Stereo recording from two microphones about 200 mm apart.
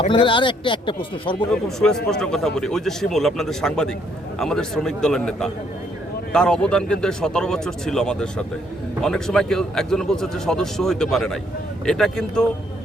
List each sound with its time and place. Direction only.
0.0 s speech: 25° left (ahead or behind)
1.5 s a man's voice: 5° left (ahead or behind)